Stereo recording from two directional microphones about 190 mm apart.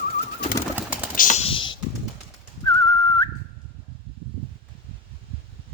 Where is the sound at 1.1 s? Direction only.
45° left (ahead or behind); by 1.8 s 25° left (ahead or behind).